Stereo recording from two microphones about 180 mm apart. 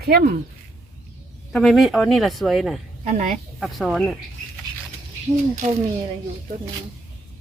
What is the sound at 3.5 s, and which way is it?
Speech, centre (ahead or behind).